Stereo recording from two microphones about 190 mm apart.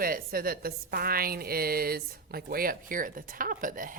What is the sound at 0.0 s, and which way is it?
A woman's voice, 50° right (ahead or behind).